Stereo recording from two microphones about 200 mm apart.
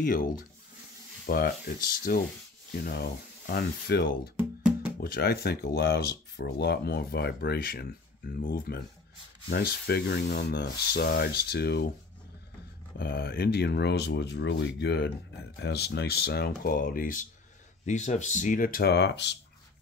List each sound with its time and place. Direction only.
0.0 s speech: 45° left (ahead or behind)
4.4 s music: 5° right (ahead or behind)
5.0 s speech: 50° left (ahead or behind)
12.9 s speech: 50° left (ahead or behind)